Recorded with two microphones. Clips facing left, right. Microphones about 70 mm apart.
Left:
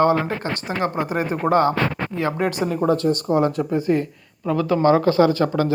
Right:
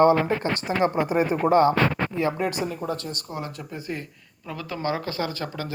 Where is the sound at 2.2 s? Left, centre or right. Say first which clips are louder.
Left 3 dB; left.